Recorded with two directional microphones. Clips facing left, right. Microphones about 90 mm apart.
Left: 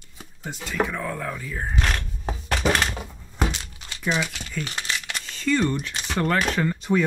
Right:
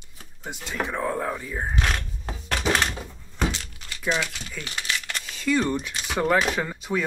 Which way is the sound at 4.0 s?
5° left (ahead or behind).